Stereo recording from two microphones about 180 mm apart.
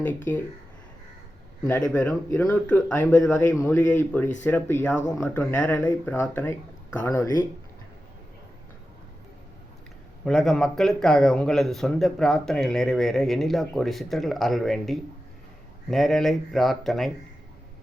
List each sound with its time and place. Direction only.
0.3 s speech: 15° left (ahead or behind)
1.6 s speech: 15° left (ahead or behind)
10.2 s speech: centre (ahead or behind)